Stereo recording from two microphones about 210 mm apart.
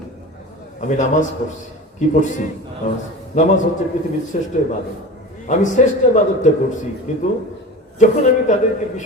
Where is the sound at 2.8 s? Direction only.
35° left (ahead or behind).